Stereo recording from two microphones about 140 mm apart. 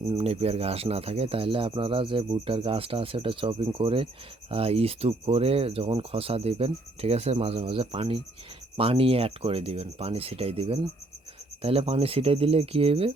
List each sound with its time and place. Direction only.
0.1 s speech: 45° right (ahead or behind)